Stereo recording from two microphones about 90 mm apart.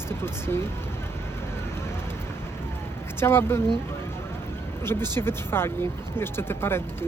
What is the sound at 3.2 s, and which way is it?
Speech, 25° left (ahead or behind).